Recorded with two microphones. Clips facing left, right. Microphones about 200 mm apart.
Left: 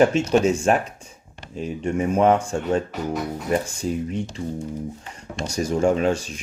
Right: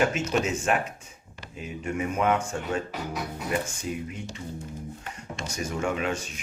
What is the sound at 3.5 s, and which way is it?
Speech, 35° left (ahead or behind).